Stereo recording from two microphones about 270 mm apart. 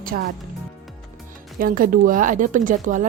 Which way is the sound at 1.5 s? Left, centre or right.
Right.